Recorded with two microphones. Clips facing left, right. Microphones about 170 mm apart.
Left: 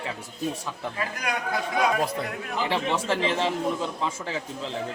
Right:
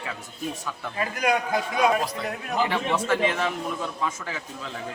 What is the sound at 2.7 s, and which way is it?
A man's voice, 30° left (ahead or behind).